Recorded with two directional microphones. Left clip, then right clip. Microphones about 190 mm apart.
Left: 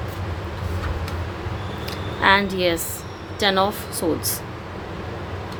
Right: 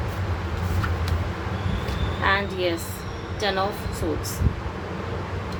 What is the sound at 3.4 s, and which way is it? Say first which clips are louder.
Speech: left 5 dB; 40° left (ahead or behind).